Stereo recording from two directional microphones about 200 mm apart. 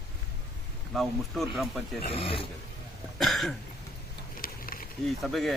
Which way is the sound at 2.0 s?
30° left (ahead or behind).